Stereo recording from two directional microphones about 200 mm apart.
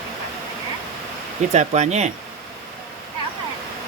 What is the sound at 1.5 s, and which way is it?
Speech, 35° right (ahead or behind).